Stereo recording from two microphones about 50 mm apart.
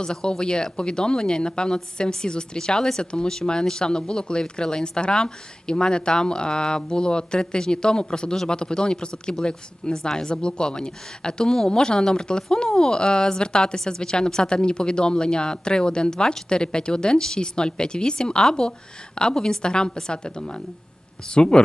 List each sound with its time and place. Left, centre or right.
0.0 s speech: centre